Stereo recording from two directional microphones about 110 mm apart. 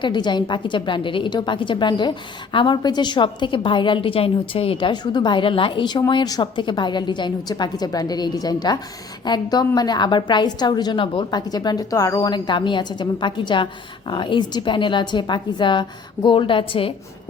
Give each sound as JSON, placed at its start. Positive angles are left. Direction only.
{"t": 0.0, "sound": "a woman's voice", "side_deg": 45}